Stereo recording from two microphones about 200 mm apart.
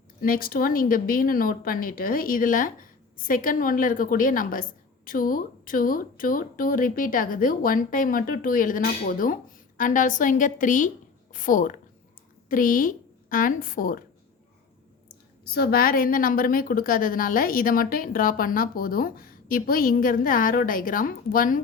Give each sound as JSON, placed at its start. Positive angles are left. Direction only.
{"t": 0.2, "sound": "a woman's voice", "side_deg": 45}
{"t": 15.5, "sound": "a woman's voice", "side_deg": 50}